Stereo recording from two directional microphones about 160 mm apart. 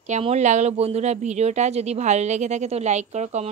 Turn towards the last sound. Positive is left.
turn(degrees=-45)  # may be behind; listen again after turning